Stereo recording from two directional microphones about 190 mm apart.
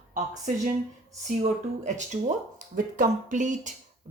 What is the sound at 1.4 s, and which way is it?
Speech, 40° right (ahead or behind).